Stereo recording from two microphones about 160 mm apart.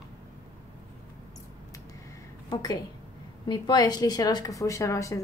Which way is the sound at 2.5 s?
25° left (ahead or behind).